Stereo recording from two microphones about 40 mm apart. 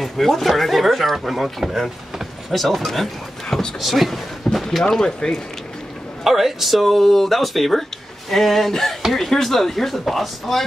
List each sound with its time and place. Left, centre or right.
0.0 s speech: centre
4.8 s speech: centre
6.2 s speech: centre